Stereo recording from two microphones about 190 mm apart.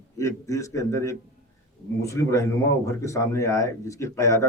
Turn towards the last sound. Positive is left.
turn(degrees=15)  # may be behind; listen again after turning